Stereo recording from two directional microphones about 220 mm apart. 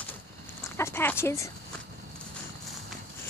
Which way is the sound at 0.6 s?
10° left (ahead or behind).